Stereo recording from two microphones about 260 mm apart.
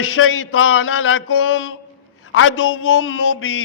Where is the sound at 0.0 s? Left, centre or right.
Left.